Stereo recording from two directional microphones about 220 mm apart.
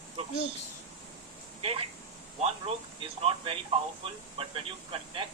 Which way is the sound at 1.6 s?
25° right (ahead or behind).